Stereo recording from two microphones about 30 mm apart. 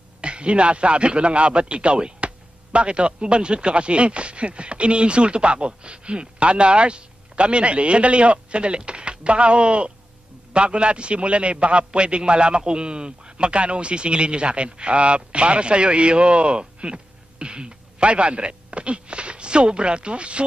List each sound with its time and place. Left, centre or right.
0.2 s a man's voice: right